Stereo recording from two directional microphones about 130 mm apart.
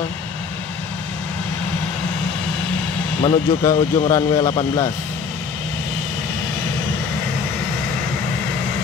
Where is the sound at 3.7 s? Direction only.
25° left (ahead or behind).